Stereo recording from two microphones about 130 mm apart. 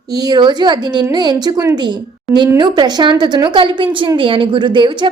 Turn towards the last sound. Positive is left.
turn(degrees=-35)  # may be behind; listen again after turning